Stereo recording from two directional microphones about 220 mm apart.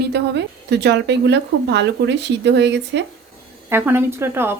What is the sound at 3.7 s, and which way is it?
Speech, 10° right (ahead or behind).